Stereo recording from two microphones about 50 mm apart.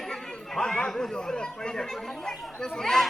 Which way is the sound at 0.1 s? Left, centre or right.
Centre.